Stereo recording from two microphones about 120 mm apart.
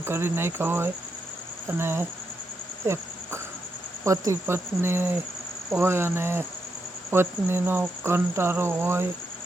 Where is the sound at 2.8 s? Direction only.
20° right (ahead or behind).